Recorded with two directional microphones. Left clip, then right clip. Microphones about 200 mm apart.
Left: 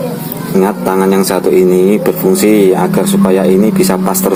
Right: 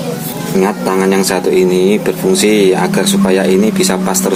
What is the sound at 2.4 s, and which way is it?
Speech, 15° left (ahead or behind).